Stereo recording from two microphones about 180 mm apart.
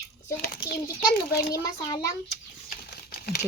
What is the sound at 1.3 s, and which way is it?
Speech, 60° left (ahead or behind).